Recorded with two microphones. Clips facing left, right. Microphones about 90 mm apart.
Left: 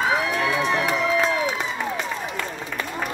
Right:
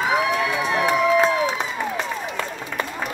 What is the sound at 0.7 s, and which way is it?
Crowd, 15° right (ahead or behind).